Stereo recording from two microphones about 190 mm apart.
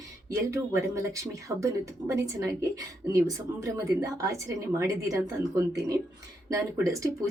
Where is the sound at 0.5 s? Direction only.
15° right (ahead or behind).